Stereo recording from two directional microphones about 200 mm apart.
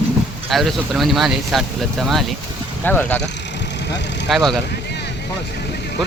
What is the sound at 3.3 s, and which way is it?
Vehicle, 60° left (ahead or behind).